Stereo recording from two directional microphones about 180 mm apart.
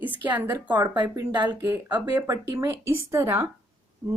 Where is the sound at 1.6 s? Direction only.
15° right (ahead or behind).